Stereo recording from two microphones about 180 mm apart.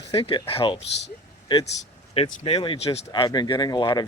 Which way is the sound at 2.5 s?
30° left (ahead or behind).